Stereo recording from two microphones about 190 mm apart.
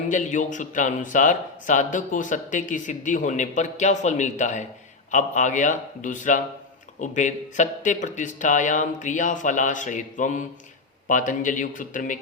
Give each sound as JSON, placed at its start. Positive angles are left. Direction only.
{"t": 0.1, "sound": "speech", "side_deg": 40}